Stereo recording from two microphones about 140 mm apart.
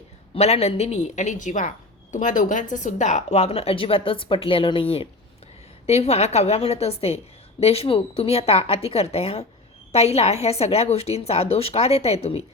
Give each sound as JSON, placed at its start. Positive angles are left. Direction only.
{"t": 0.3, "sound": "a woman's voice", "side_deg": 50}